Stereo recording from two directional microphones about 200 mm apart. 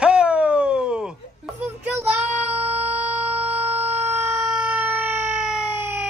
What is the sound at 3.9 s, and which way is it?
Siren, 35° right (ahead or behind).